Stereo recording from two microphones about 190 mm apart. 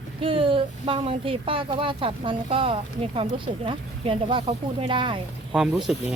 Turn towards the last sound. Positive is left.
turn(degrees=0)  # may be behind; listen again after turning